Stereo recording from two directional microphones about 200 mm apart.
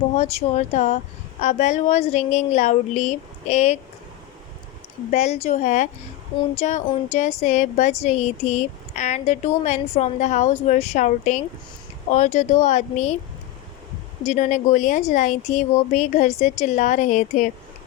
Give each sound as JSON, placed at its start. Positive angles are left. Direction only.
{"t": 0.2, "sound": "a woman's voice", "side_deg": 35}
{"t": 5.1, "sound": "a woman's voice", "side_deg": 35}
{"t": 14.3, "sound": "a woman's voice", "side_deg": 35}